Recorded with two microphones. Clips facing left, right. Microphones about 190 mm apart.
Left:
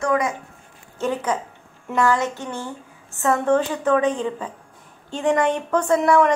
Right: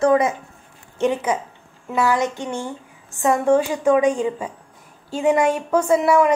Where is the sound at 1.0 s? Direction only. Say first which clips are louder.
Right 3 dB; 10° right (ahead or behind).